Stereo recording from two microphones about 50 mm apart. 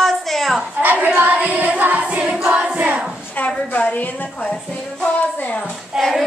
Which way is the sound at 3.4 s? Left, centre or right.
Left.